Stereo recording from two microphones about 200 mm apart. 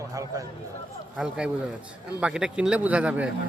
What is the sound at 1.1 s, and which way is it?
Speech, 5° right (ahead or behind).